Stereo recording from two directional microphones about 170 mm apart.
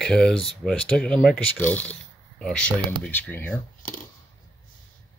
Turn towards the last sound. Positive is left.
turn(degrees=10)  # may be behind; listen again after turning